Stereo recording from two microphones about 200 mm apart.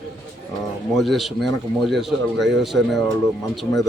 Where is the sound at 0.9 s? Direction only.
Centre (ahead or behind).